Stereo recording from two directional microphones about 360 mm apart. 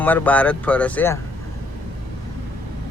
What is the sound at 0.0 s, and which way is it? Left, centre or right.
Speech, centre.